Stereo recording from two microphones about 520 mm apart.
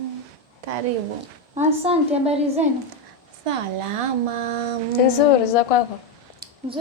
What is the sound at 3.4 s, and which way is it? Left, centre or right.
Speech, right.